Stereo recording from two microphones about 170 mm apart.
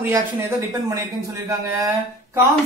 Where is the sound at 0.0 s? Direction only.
15° right (ahead or behind).